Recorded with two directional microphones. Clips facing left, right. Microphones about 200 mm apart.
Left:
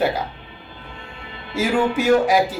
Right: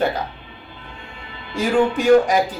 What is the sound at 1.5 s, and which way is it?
Speech, 5° left (ahead or behind).